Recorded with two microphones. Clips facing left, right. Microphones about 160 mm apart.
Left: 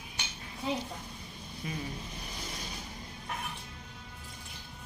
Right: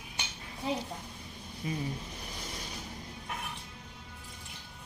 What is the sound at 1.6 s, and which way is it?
Speech, 30° right (ahead or behind).